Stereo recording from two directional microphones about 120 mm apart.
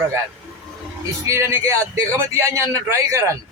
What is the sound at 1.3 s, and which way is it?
A man's voice, 20° right (ahead or behind).